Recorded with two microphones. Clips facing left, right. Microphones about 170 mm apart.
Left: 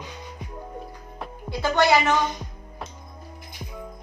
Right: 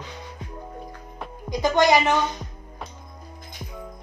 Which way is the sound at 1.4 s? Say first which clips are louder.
Right 2 dB; 15° right (ahead or behind).